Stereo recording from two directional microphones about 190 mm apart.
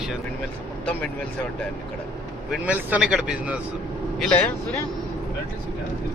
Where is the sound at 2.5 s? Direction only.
10° right (ahead or behind).